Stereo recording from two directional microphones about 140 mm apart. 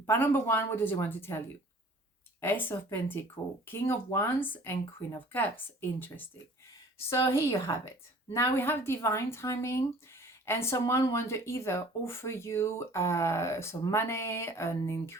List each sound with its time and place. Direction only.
0.0 s speech: 15° left (ahead or behind)
2.4 s speech: 15° left (ahead or behind)